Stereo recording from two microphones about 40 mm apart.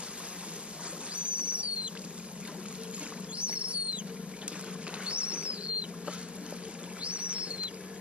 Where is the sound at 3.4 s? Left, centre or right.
Right.